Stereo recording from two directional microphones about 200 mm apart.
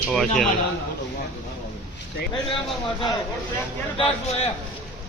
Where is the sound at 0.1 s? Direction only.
5° left (ahead or behind).